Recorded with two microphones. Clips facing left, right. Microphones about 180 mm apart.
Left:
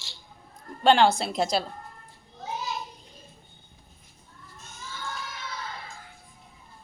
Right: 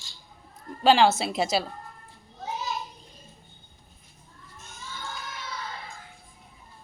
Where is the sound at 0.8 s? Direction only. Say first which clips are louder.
Even; 5° right (ahead or behind).